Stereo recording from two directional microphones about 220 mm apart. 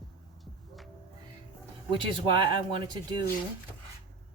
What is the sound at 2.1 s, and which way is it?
Speech, 20° right (ahead or behind).